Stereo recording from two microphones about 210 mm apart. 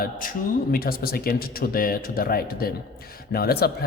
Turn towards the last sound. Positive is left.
turn(degrees=50)  # may be behind; listen again after turning